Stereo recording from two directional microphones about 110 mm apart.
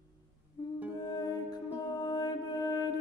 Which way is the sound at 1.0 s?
35° left (ahead or behind).